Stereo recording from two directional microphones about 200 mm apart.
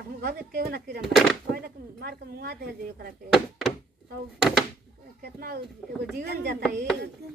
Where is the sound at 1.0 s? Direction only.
Centre (ahead or behind).